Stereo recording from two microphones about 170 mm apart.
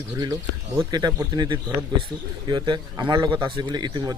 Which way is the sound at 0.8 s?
25° right (ahead or behind).